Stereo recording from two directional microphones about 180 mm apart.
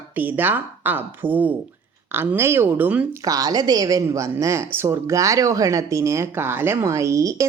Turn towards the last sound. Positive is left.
turn(degrees=-20)  # may be behind; listen again after turning